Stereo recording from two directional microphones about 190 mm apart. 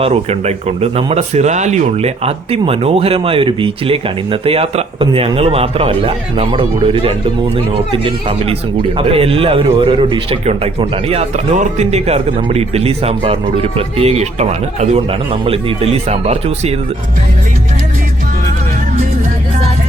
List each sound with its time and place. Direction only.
0.0 s speech: 35° right (ahead or behind)